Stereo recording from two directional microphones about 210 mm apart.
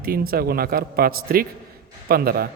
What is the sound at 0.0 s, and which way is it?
Speech, 45° right (ahead or behind).